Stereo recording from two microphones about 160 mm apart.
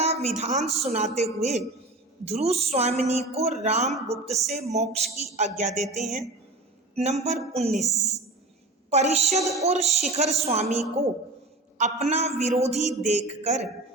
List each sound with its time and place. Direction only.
0.0 s a woman's voice: 40° right (ahead or behind)
6.9 s music: 40° right (ahead or behind)
7.5 s speech: 40° right (ahead or behind)
8.9 s speech: 45° right (ahead or behind)
9.4 s speech: 20° right (ahead or behind)
9.6 s a woman's voice: 45° right (ahead or behind)